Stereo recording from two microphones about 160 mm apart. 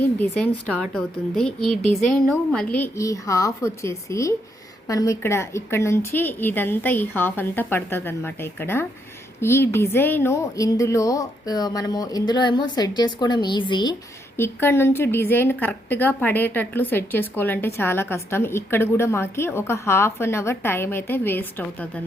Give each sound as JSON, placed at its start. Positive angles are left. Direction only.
{"t": 0.0, "sound": "a woman's voice", "side_deg": 10}
{"t": 14.3, "sound": "a woman's voice", "side_deg": 15}